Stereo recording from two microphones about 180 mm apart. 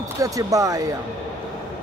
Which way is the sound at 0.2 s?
20° right (ahead or behind).